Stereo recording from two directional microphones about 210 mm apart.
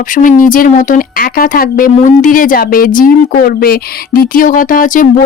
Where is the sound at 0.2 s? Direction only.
40° left (ahead or behind).